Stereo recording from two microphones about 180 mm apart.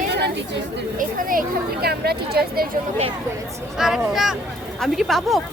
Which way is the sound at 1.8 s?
60° right (ahead or behind).